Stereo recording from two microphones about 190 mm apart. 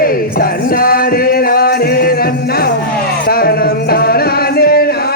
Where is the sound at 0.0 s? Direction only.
50° left (ahead or behind).